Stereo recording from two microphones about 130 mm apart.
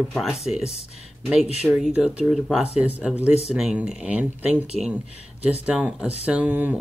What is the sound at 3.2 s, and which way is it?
Speech, 55° left (ahead or behind).